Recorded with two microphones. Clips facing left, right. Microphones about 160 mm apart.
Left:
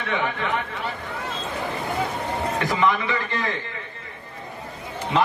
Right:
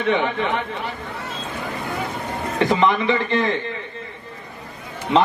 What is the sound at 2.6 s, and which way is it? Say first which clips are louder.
Speech: right 6 dB; 25° right (ahead or behind).